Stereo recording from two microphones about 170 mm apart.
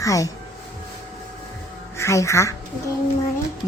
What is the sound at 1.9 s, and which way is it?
Speech, 15° left (ahead or behind).